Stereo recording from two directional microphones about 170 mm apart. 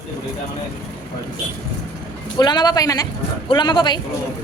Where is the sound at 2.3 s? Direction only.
25° left (ahead or behind).